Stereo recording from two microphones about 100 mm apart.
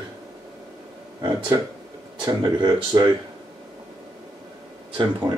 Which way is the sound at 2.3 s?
40° right (ahead or behind).